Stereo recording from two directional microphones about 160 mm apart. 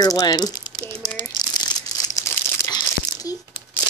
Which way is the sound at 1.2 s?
25° left (ahead or behind).